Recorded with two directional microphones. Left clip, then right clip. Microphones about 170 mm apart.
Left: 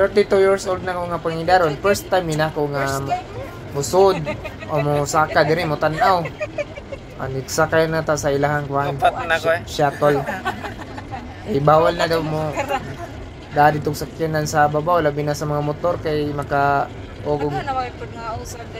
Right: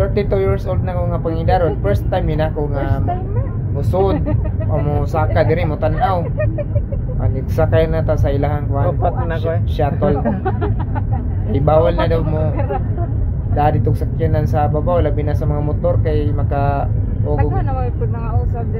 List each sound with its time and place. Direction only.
0.1 s speech: 15° left (ahead or behind)
3.9 s speech: 20° left (ahead or behind)
7.5 s speech: 15° left (ahead or behind)
11.6 s speech: 15° left (ahead or behind)
13.6 s speech: 15° left (ahead or behind)